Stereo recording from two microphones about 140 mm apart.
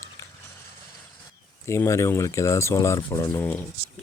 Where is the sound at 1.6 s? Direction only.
20° left (ahead or behind).